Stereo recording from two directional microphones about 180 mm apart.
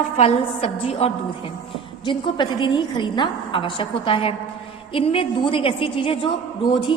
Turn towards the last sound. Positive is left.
turn(degrees=25)  # may be behind; listen again after turning